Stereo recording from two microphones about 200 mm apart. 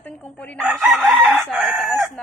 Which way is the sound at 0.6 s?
5° right (ahead or behind).